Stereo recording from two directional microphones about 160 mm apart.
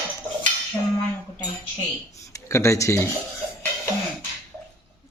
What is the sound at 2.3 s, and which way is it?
Speech, 20° left (ahead or behind).